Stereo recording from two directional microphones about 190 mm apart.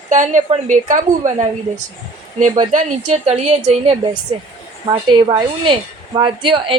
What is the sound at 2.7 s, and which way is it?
A woman's voice, 35° right (ahead or behind).